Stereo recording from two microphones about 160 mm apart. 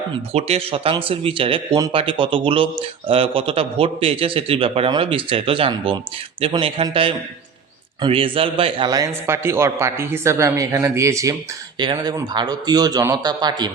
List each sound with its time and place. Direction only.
0.3 s speech: 40° right (ahead or behind)
8.9 s a man's voice: 20° right (ahead or behind)